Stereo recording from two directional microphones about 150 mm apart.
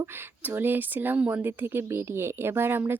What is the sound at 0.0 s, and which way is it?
Speech, 15° right (ahead or behind).